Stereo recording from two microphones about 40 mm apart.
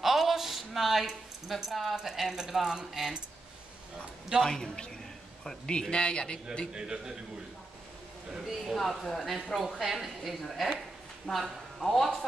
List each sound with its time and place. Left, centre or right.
0.0 s a woman's voice: centre
4.4 s a man's voice: centre
6.7 s a man's voice: centre
8.3 s a woman's voice: centre
8.7 s a woman's voice: centre
11.3 s a man's voice: left
11.8 s a woman's voice: centre